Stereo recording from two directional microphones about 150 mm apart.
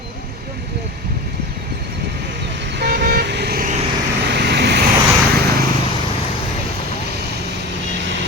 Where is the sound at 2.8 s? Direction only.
90° right.